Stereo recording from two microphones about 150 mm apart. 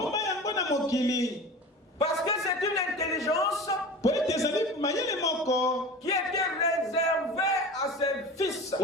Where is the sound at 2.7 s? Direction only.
25° left (ahead or behind).